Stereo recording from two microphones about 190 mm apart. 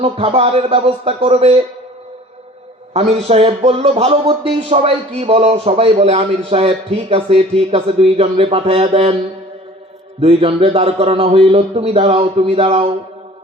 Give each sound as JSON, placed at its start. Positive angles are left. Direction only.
{"t": 0.0, "sound": "speech", "side_deg": -30}
{"t": 2.9, "sound": "speech", "side_deg": -35}
{"t": 10.2, "sound": "speech", "side_deg": -30}